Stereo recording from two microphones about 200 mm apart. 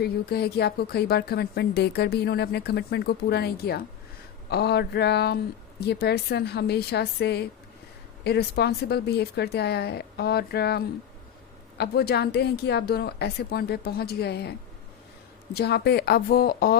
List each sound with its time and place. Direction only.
0.0 s a woman's voice: 55° left (ahead or behind)
15.5 s speech: 55° left (ahead or behind)